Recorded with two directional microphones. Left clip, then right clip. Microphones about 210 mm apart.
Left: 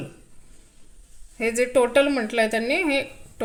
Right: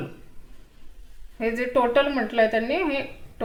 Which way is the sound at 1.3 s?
40° left (ahead or behind).